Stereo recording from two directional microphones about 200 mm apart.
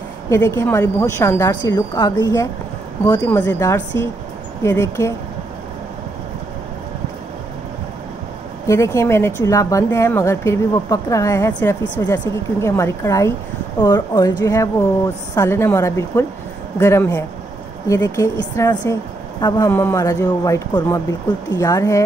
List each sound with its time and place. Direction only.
0.3 s a woman's voice: 15° left (ahead or behind)
8.6 s a woman's voice: 15° left (ahead or behind)